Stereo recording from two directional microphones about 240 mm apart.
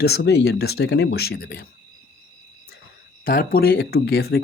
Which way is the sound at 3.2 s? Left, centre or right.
Left.